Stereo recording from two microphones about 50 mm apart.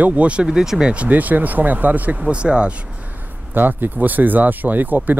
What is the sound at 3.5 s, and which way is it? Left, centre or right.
Speech, right.